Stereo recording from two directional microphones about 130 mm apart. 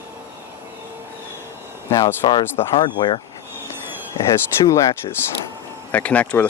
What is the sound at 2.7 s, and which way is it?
Speech, 35° left (ahead or behind).